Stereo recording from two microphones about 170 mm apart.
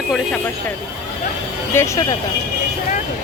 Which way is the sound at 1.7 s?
15° left (ahead or behind).